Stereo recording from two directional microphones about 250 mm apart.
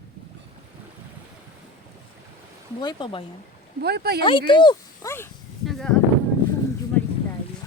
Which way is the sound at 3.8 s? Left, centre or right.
Right.